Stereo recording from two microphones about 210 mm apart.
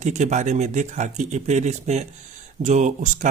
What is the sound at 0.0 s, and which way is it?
Speech, 35° right (ahead or behind).